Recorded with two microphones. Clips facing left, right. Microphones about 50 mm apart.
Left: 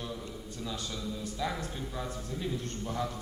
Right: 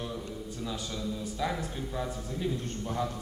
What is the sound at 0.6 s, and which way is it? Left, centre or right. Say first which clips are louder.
A man's voice: right 1 dB; centre.